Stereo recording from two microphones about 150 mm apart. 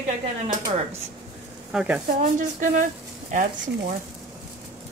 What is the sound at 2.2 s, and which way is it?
Speech, 60° right (ahead or behind).